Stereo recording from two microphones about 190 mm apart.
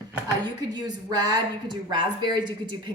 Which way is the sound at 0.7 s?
20° right (ahead or behind).